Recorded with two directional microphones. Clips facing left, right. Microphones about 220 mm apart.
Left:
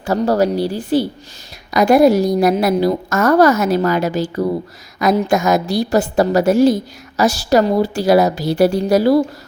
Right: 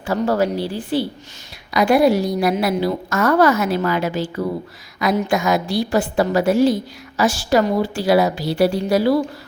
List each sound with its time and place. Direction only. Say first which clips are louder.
0.0 s a woman's voice: left 3 dB; 40° left (ahead or behind)